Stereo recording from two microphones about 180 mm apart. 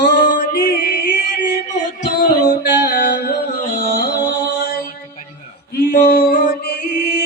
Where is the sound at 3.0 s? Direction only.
55° left (ahead or behind).